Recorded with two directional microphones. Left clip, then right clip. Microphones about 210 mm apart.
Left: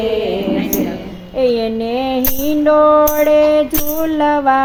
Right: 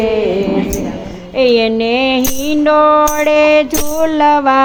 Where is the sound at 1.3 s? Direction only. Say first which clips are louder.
Right 4 dB; 25° right (ahead or behind).